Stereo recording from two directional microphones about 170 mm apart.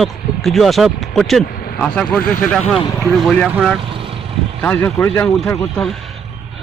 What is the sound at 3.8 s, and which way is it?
Vehicle, 30° right (ahead or behind).